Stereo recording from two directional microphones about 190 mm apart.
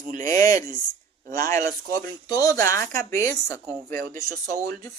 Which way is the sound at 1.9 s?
20° left (ahead or behind).